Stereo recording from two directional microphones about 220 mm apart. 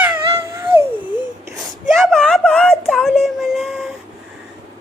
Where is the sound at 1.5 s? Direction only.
Centre (ahead or behind).